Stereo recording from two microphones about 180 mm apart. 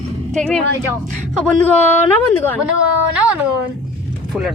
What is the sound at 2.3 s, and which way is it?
Speech, 10° left (ahead or behind).